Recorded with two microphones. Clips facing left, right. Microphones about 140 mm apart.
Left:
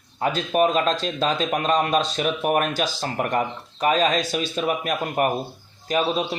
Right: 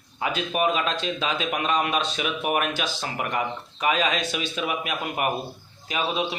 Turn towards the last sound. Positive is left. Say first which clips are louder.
# left 4 dB
turn(degrees=40)  # may be behind; listen again after turning